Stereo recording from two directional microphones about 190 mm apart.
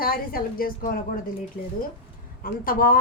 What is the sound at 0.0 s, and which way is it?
A woman's voice, 50° left (ahead or behind).